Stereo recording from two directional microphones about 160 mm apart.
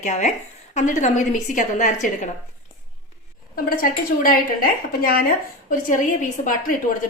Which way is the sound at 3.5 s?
65° left (ahead or behind).